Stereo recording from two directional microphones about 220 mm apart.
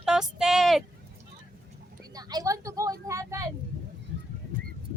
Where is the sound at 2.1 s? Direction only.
20° right (ahead or behind).